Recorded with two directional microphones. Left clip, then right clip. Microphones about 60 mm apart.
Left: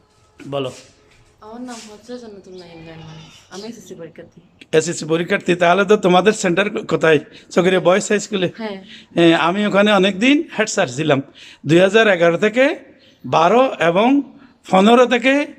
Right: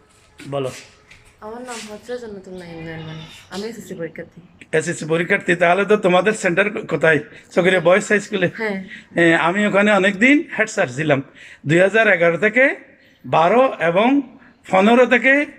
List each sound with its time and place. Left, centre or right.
2.0 s a woman's voice: centre
4.7 s a man's voice: left